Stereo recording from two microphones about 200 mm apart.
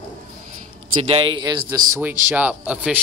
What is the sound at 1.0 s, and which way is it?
Speech, 25° right (ahead or behind).